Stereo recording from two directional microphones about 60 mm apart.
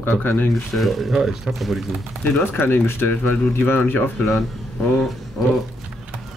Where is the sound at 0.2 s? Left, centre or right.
Left.